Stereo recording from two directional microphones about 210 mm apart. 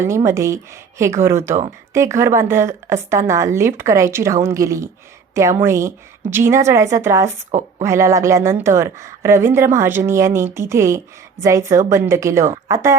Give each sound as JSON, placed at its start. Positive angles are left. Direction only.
{"t": 0.0, "sound": "a woman's voice", "side_deg": -15}